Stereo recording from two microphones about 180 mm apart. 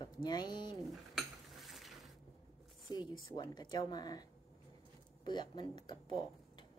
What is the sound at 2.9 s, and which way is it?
A woman's voice, 20° left (ahead or behind).